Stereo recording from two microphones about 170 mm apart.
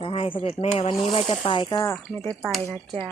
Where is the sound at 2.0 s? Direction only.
Centre (ahead or behind).